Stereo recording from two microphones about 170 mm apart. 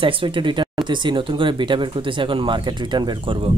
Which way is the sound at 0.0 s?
30° right (ahead or behind).